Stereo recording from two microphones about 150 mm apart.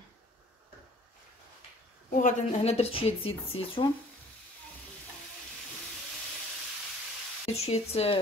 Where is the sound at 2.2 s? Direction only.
45° left (ahead or behind).